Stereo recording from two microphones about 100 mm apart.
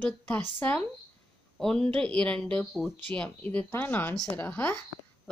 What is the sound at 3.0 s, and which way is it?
A woman's voice, 15° left (ahead or behind).